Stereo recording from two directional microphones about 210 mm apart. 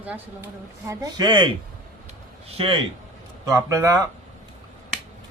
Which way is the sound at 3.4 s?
15° right (ahead or behind).